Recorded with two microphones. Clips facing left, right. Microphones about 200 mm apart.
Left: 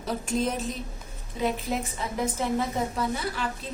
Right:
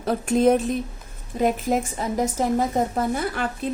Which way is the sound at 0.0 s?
55° right (ahead or behind).